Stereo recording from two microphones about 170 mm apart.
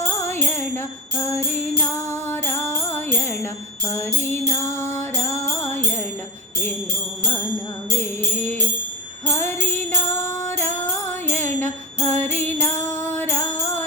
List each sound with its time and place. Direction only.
0.2 s music: 15° left (ahead or behind)
2.3 s music: 15° left (ahead or behind)
11.4 s music: 15° left (ahead or behind)